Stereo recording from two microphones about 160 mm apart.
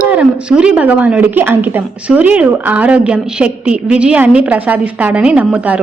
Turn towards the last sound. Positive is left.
turn(degrees=-10)  # may be behind; listen again after turning